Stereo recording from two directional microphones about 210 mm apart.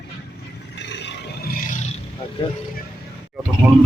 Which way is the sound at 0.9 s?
55° left (ahead or behind).